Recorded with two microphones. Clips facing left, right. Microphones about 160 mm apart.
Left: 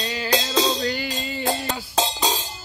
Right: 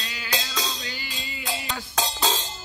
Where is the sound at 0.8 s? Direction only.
50° left (ahead or behind).